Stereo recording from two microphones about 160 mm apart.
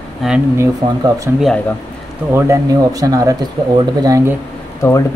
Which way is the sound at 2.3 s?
20° right (ahead or behind).